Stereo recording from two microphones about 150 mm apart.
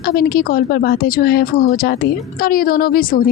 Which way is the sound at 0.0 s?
90° left.